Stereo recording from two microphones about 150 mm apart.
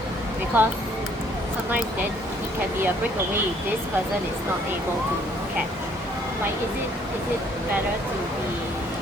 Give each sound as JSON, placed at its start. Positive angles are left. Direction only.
{"t": 0.5, "sound": "speech", "side_deg": -15}